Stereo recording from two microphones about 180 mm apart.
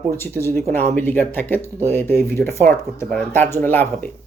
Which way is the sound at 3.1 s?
10° left (ahead or behind).